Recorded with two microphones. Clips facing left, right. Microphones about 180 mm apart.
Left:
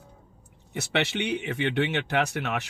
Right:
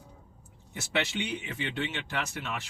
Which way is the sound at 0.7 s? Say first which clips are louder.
Left 4 dB; 70° left (ahead or behind).